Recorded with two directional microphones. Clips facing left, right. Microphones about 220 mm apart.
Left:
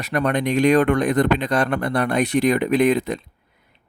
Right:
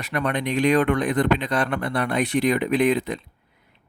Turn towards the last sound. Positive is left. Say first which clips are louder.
# left 3 dB
turn(degrees=45)  # may be behind; listen again after turning